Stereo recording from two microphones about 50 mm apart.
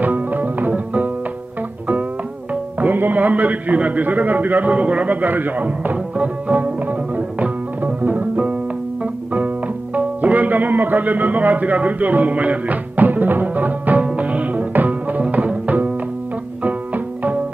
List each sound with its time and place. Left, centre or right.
0.0 s music: right
2.5 s speech: right
6.1 s music: right
9.9 s a man's voice: right
14.0 s music: right